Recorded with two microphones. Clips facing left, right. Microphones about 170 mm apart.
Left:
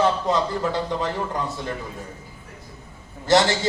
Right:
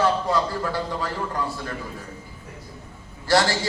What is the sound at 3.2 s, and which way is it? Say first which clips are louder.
Speech: left 2 dB; 20° left (ahead or behind).